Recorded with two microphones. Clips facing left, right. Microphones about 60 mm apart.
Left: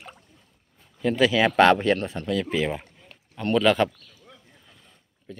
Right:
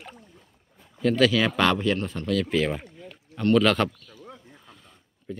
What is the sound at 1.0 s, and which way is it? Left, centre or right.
Speech, centre.